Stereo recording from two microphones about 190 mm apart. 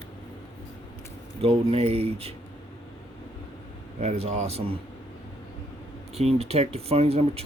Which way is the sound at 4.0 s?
35° right (ahead or behind).